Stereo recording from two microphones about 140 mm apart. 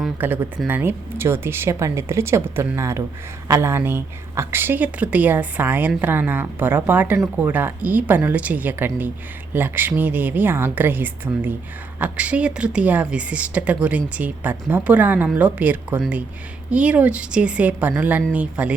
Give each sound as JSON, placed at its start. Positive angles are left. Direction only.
{"t": 0.2, "sound": "speech", "side_deg": -15}